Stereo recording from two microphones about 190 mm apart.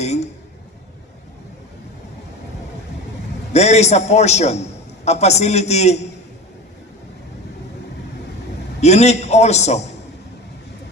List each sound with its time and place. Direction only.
0.0 s a sound: 35° left (ahead or behind)
3.5 s a man's voice: 35° left (ahead or behind)
8.8 s a man's voice: 35° left (ahead or behind)